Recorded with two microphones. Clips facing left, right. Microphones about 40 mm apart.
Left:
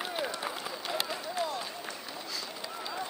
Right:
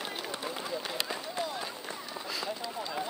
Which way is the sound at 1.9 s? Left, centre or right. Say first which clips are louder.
Right 2 dB; centre.